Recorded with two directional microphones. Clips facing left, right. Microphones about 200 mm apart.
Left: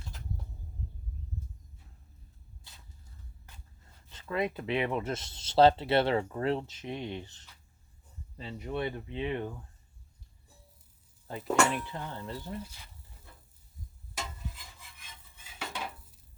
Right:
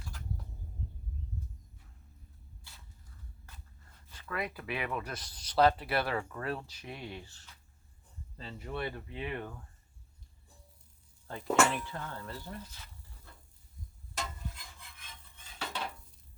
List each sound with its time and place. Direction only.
2.7 s a sound: 20° left (ahead or behind)
4.1 s speech: 25° left (ahead or behind)
11.4 s speech: 5° right (ahead or behind)
11.9 s speech: 20° left (ahead or behind)
14.2 s stir: 5° left (ahead or behind)
15.4 s dishes: 5° left (ahead or behind)